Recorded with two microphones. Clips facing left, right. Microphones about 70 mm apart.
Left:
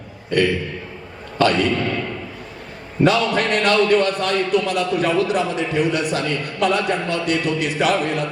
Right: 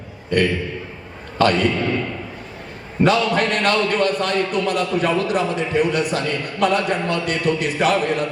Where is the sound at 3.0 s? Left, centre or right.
Right.